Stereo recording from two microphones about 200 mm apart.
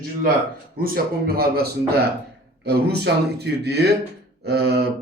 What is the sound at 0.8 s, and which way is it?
Speech, 50° right (ahead or behind).